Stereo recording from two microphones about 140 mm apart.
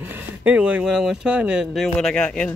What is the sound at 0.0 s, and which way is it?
Speech, 15° right (ahead or behind).